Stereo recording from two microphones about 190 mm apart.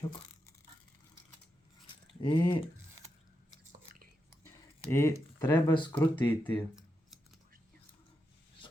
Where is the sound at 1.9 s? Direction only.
25° left (ahead or behind).